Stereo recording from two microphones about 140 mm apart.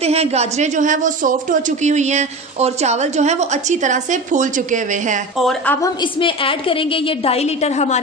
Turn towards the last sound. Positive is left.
turn(degrees=55)  # may be behind; listen again after turning